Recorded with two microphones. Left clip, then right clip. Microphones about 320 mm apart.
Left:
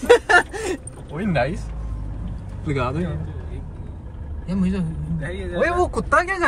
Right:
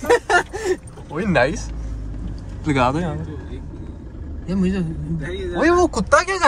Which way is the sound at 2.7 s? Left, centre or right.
Right.